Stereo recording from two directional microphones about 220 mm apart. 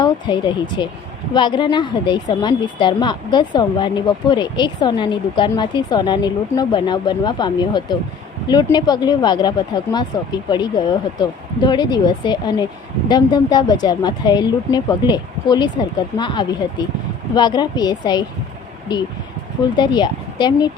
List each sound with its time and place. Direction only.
0.0 s a woman's voice: 20° left (ahead or behind)